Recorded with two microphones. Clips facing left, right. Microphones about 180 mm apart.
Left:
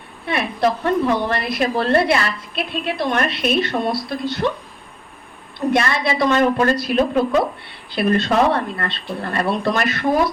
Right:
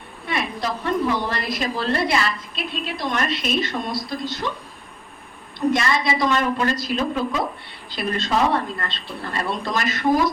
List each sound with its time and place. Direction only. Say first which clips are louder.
0.3 s a woman's voice: left 6 dB; 60° left (ahead or behind)
5.5 s a woman's voice: left 2 dB; 60° left (ahead or behind)